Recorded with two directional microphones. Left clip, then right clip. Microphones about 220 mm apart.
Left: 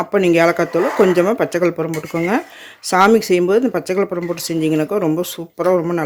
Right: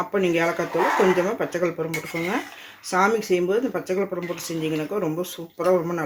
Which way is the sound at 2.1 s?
35° left (ahead or behind).